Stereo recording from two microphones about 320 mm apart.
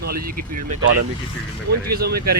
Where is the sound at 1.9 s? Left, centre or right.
Right.